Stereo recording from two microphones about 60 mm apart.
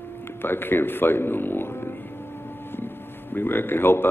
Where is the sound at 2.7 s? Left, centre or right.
Left.